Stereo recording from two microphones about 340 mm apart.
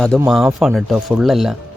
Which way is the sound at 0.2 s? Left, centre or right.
Centre.